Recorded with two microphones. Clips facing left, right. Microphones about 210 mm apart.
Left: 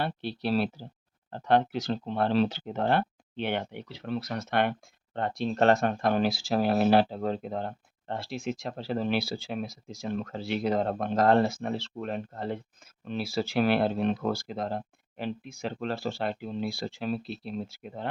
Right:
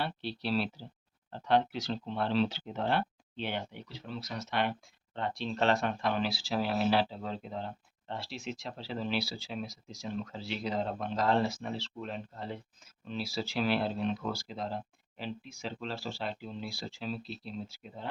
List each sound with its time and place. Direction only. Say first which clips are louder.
0.0 s speech: left 4 dB; 50° left (ahead or behind)